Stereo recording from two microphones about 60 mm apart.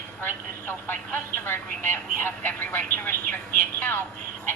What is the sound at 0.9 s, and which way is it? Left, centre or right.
A woman's voice, left.